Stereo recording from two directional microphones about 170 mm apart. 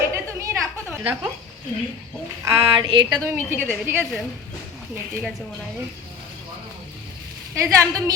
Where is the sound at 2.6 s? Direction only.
30° right (ahead or behind).